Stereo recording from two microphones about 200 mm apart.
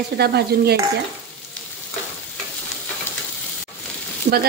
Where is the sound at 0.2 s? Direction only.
55° right (ahead or behind).